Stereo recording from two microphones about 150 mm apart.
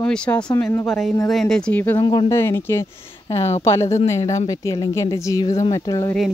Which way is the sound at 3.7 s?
20° left (ahead or behind).